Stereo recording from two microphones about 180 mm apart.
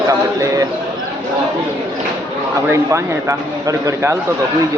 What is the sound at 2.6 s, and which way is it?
A man's voice, 15° right (ahead or behind).